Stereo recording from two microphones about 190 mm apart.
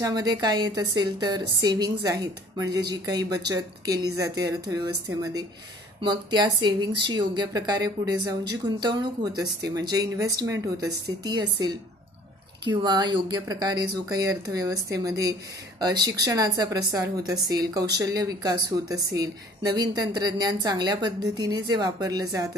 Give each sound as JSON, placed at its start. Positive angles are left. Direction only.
{"t": 0.0, "sound": "a woman's voice", "side_deg": -20}
{"t": 12.6, "sound": "a woman's voice", "side_deg": -25}